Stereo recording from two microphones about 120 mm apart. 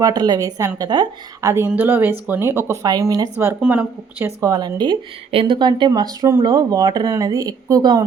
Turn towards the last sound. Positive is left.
turn(degrees=-30)  # may be behind; listen again after turning